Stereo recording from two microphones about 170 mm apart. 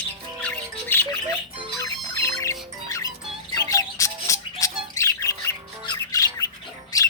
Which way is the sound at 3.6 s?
20° left (ahead or behind).